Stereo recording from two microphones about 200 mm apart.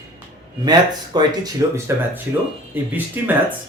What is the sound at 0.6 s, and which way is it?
Speech, 20° right (ahead or behind).